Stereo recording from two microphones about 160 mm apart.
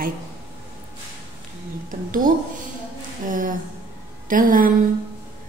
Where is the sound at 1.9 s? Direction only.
55° right (ahead or behind).